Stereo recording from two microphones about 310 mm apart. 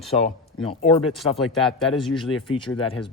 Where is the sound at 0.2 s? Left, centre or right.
Left.